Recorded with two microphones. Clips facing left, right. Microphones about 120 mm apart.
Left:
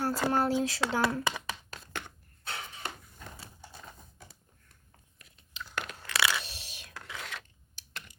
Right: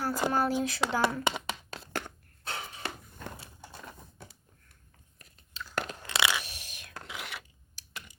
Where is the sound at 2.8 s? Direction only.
65° right (ahead or behind).